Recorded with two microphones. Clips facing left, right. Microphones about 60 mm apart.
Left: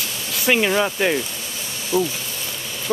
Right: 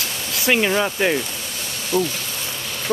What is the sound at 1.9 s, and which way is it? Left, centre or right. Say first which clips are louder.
Speech: even; right.